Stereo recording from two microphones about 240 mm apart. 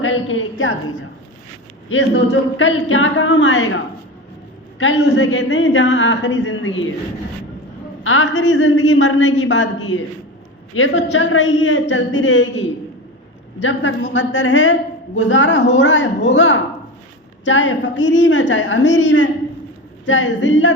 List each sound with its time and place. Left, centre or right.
0.0 s a woman's voice: left
1.9 s a woman's voice: left
4.8 s a woman's voice: left
8.0 s a woman's voice: left